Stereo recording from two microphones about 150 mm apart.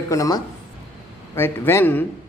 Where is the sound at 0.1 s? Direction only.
20° left (ahead or behind).